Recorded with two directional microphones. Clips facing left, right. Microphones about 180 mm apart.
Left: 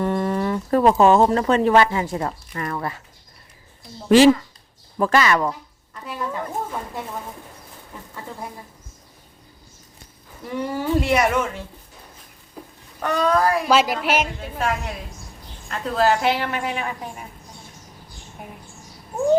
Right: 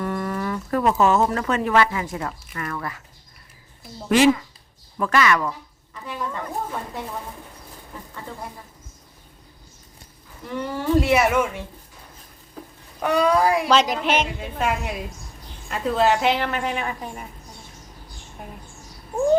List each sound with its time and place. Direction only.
0.0 s speech: 25° left (ahead or behind)
4.1 s speech: 30° left (ahead or behind)
5.5 s a sound: 5° left (ahead or behind)
10.5 s speech: 10° left (ahead or behind)
11.0 s speech: 5° right (ahead or behind)
13.0 s speech: 10° right (ahead or behind)
13.7 s a woman's voice: 5° left (ahead or behind)